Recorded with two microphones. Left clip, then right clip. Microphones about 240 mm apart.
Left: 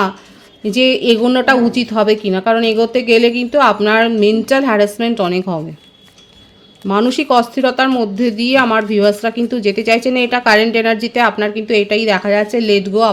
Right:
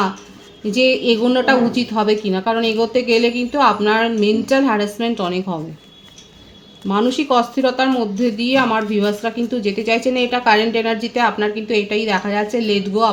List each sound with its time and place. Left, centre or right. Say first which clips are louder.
0.6 s speech: left 3 dB; left
6.8 s speech: left 3 dB; left